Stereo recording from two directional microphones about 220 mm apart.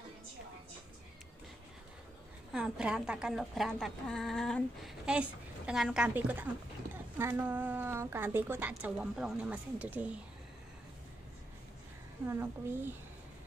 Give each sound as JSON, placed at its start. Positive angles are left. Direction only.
{"t": 2.5, "sound": "a woman's voice", "side_deg": -5}
{"t": 12.3, "sound": "a woman's voice", "side_deg": -10}